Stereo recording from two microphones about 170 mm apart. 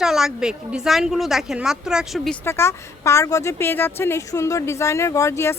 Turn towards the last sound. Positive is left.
turn(degrees=15)  # may be behind; listen again after turning